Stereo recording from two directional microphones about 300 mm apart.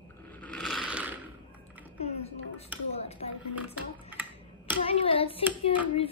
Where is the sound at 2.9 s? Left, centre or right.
Left.